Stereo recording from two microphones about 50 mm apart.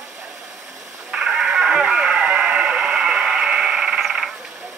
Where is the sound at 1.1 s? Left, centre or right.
Centre.